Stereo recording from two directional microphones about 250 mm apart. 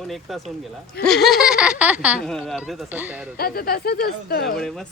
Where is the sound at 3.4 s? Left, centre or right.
Left.